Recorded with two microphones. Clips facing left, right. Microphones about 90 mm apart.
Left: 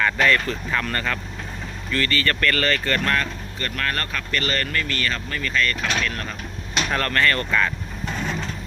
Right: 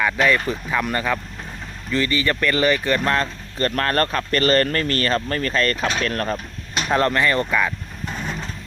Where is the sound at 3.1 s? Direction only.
35° right (ahead or behind).